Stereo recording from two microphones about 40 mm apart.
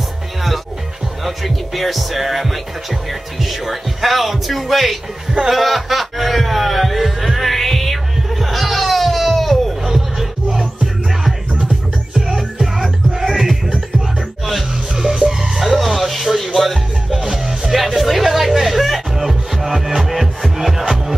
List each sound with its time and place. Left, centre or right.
1.2 s speech: centre
5.5 s music: centre
9.8 s music: centre
12.2 s music: centre